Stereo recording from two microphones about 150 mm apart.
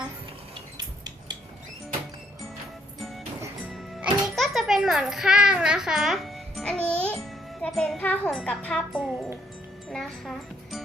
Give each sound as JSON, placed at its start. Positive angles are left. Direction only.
{"t": 0.8, "sound": "a sound", "side_deg": -25}
{"t": 4.0, "sound": "music", "side_deg": 0}
{"t": 7.9, "sound": "wind chime", "side_deg": 10}
{"t": 8.3, "sound": "speech", "side_deg": 5}